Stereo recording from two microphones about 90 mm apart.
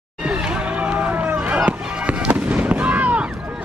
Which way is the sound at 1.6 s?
15° right (ahead or behind).